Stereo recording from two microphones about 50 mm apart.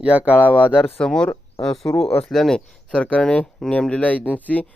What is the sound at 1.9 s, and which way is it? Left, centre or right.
Speech, left.